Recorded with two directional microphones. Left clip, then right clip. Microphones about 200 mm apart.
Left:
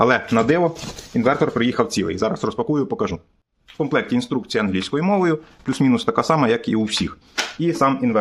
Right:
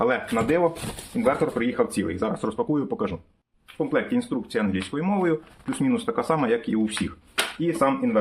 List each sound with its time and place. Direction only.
0.0 s speech: 60° left (ahead or behind); by 3.2 s 35° left (ahead or behind)
3.8 s speech: 60° left (ahead or behind)